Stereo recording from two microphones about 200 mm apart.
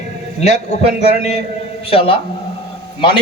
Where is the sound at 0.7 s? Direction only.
30° left (ahead or behind).